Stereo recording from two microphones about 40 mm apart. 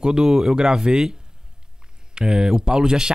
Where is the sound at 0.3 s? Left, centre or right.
Centre.